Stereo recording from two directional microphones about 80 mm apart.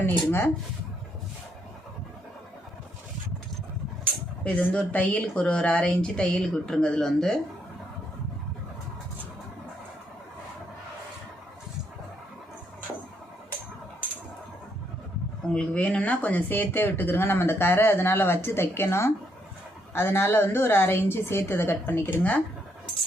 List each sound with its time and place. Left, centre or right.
0.0 s speech: left
4.4 s speech: centre
15.5 s speech: centre